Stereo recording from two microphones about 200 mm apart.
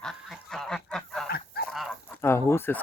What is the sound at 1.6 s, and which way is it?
Goose, 50° left (ahead or behind).